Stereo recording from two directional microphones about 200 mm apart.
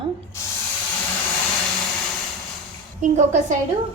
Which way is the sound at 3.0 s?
35° right (ahead or behind).